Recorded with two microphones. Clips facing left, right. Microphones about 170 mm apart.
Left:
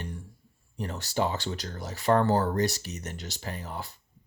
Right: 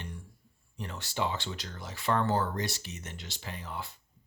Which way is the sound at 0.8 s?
40° left (ahead or behind).